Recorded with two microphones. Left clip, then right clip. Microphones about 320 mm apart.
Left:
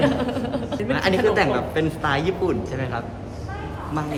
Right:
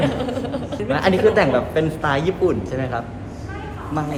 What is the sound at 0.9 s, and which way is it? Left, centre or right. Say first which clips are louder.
A woman's voice: right 4 dB; centre.